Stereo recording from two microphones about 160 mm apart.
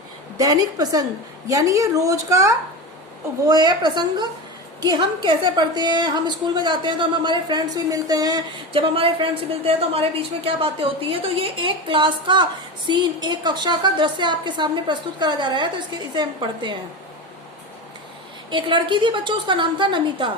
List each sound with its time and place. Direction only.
0.3 s a woman's voice: 25° right (ahead or behind)
18.5 s a woman's voice: 30° right (ahead or behind)